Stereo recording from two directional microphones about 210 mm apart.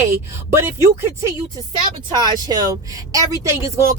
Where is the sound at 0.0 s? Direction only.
10° right (ahead or behind).